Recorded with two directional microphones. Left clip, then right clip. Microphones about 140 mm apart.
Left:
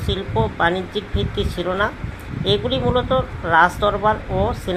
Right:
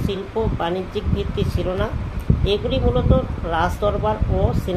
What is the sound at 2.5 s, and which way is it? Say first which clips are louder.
Speech: left 2 dB; 20° left (ahead or behind).